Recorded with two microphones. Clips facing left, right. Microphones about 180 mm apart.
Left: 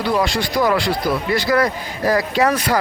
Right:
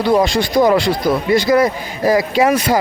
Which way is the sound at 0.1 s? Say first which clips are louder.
Right 6 dB; 20° right (ahead or behind).